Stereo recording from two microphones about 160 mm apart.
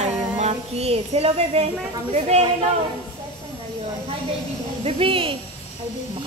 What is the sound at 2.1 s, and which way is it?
Speech, 40° right (ahead or behind).